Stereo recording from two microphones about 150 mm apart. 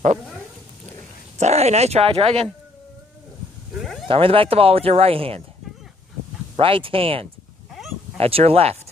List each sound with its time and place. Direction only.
1.4 s speech: 45° right (ahead or behind)
4.1 s speech: 35° right (ahead or behind)
6.5 s speech: 35° right (ahead or behind)